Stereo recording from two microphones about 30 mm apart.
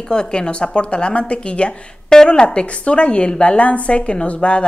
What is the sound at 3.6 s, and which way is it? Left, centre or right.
Speech, left.